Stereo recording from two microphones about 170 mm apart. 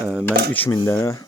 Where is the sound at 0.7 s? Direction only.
25° left (ahead or behind).